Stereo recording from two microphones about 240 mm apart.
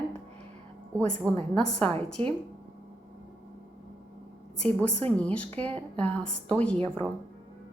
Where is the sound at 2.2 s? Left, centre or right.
Right.